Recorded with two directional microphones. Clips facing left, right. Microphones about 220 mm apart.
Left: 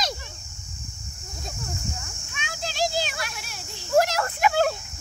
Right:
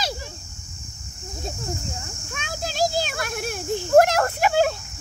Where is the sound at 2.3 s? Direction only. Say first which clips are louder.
Right 4 dB; 45° right (ahead or behind).